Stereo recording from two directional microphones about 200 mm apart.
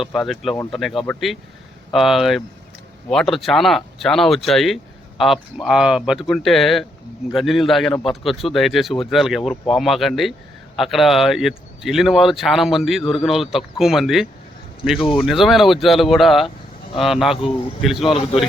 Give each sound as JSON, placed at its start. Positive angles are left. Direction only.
{"t": 0.0, "sound": "speech", "side_deg": 0}
{"t": 14.9, "sound": "speech", "side_deg": 25}
{"t": 15.2, "sound": "speech", "side_deg": 0}